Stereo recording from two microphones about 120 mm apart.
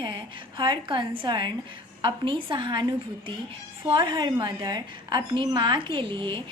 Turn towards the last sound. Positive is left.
turn(degrees=-45)  # may be behind; listen again after turning